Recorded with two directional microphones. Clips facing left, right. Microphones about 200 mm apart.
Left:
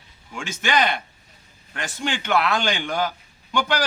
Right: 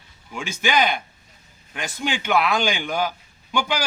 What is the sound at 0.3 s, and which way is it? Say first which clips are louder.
A man's voice: right 1 dB; centre (ahead or behind).